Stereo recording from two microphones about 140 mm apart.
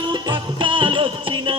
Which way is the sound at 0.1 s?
35° right (ahead or behind).